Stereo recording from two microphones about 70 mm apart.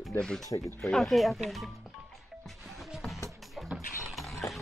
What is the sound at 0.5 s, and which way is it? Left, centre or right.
Speech, left.